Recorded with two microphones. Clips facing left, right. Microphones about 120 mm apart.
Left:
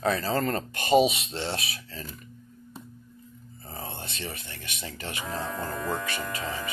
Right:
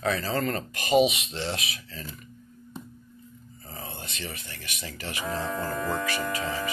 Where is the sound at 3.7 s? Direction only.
30° left (ahead or behind).